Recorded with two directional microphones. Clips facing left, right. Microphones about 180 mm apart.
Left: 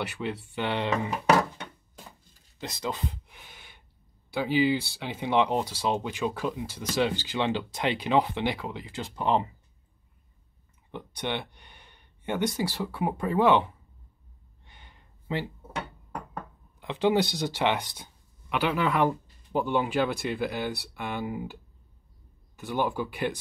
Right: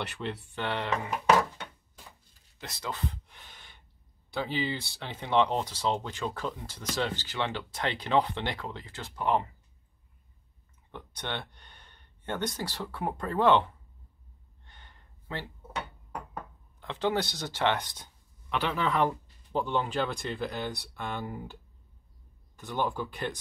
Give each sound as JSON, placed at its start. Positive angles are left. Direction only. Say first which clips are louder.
{"t": 0.0, "sound": "speech", "louder": "left 3 dB", "side_deg": 5}
{"t": 0.6, "sound": "speech", "louder": "left 4 dB", "side_deg": 15}
{"t": 2.6, "sound": "a sound", "louder": "left 4 dB", "side_deg": 20}
{"t": 4.3, "sound": "speech", "louder": "left 7 dB", "side_deg": 10}
{"t": 10.9, "sound": "speech", "louder": "left 5 dB", "side_deg": 15}
{"t": 14.6, "sound": "a sound", "louder": "left 2 dB", "side_deg": 10}
{"t": 16.8, "sound": "speech", "louder": "left 5 dB", "side_deg": 15}
{"t": 22.6, "sound": "speech", "louder": "left 3 dB", "side_deg": 10}